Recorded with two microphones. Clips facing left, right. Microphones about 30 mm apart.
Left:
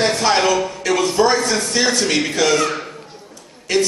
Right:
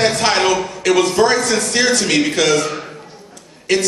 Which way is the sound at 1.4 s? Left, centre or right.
Right.